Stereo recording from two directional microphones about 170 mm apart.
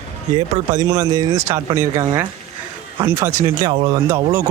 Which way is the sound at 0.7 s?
20° right (ahead or behind).